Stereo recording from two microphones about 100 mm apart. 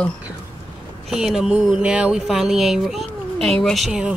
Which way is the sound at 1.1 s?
Centre (ahead or behind).